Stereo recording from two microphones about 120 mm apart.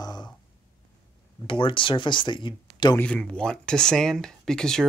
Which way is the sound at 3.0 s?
10° left (ahead or behind).